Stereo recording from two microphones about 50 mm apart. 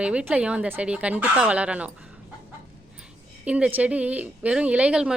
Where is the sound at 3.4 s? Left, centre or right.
Right.